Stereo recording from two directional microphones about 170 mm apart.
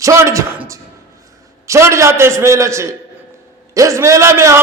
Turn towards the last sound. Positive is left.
turn(degrees=-15)  # may be behind; listen again after turning